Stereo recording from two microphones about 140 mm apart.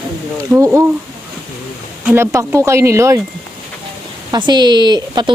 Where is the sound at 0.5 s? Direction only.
20° right (ahead or behind).